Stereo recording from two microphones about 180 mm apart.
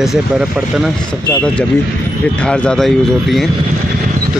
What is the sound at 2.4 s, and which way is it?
Speech, 5° left (ahead or behind).